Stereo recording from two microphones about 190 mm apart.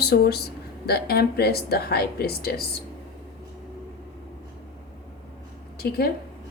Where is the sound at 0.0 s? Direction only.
55° left (ahead or behind).